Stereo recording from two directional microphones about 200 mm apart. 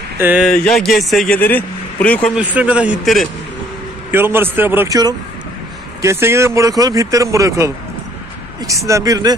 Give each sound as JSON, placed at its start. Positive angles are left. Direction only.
{"t": 0.2, "sound": "speech", "side_deg": -10}
{"t": 0.5, "sound": "a man's voice", "side_deg": 5}
{"t": 2.4, "sound": "speech", "side_deg": -5}